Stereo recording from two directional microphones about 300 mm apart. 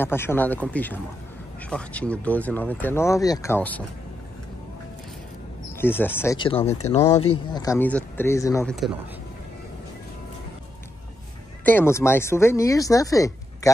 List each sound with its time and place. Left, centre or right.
0.0 s speech: centre
5.8 s speech: centre
11.6 s speech: centre